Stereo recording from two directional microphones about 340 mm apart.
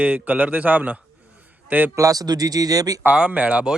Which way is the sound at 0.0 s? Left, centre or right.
Centre.